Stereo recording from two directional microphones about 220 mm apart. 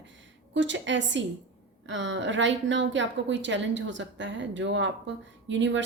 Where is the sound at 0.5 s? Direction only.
55° right (ahead or behind).